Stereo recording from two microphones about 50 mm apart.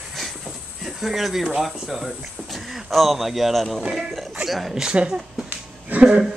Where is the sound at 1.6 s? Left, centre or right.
Centre.